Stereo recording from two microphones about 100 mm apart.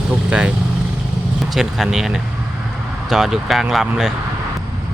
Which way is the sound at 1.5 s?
5° right (ahead or behind).